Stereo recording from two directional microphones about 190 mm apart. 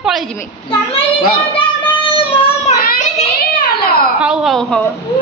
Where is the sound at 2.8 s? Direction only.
50° left (ahead or behind).